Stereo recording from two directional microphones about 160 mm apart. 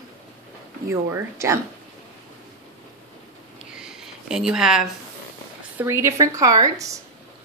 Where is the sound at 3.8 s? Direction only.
5° right (ahead or behind).